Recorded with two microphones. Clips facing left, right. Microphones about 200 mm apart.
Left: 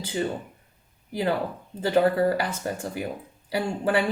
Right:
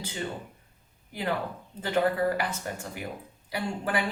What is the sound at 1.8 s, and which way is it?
Speech, 30° left (ahead or behind).